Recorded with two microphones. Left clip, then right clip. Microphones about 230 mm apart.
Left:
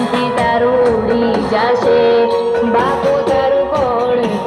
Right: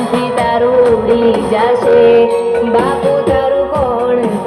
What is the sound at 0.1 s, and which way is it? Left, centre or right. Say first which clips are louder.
Music: right 2 dB; right.